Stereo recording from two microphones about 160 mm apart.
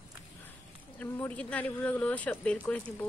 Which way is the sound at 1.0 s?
10° left (ahead or behind).